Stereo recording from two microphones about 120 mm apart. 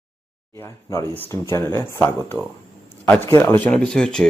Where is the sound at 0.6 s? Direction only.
25° left (ahead or behind).